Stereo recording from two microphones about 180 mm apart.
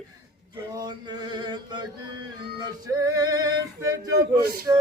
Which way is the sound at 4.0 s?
20° right (ahead or behind).